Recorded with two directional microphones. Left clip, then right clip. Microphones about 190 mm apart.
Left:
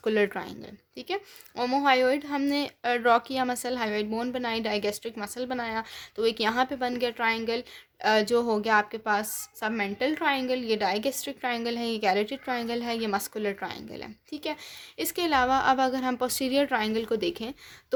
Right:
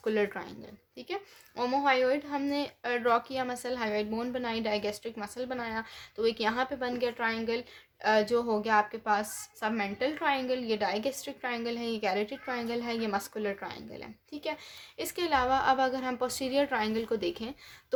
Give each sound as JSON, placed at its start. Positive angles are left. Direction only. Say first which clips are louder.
{"t": 0.0, "sound": "a woman's voice", "louder": "left 4 dB", "side_deg": 35}